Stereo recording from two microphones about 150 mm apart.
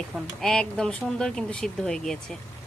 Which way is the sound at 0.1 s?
Centre (ahead or behind).